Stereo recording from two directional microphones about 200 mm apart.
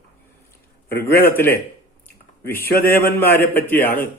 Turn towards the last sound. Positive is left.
turn(degrees=10)  # may be behind; listen again after turning